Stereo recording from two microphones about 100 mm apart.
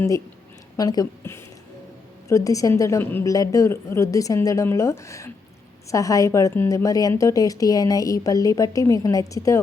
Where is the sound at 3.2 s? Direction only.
35° left (ahead or behind).